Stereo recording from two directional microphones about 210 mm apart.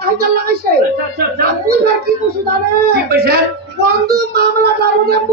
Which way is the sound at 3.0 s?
50° right (ahead or behind).